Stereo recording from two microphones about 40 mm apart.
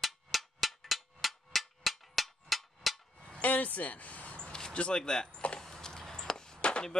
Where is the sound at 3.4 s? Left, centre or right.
Left.